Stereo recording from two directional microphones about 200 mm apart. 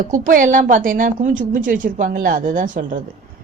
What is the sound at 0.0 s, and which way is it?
Speech, 45° right (ahead or behind).